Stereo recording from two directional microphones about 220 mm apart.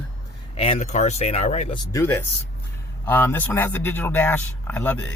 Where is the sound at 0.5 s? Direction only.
25° left (ahead or behind).